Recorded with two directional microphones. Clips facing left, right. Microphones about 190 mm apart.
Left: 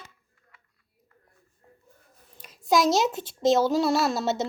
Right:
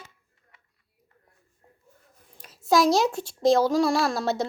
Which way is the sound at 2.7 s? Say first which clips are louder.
Right 1 dB; 20° left (ahead or behind).